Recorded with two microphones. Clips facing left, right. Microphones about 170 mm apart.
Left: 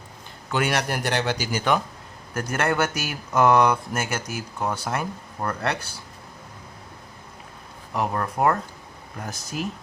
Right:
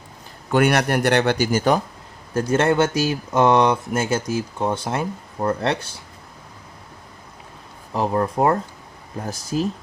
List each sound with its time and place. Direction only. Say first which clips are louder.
0.5 s a man's voice: right 7 dB; 55° right (ahead or behind)
2.3 s speech: right 6 dB; 25° right (ahead or behind)
7.9 s speech: right 5 dB; 25° right (ahead or behind)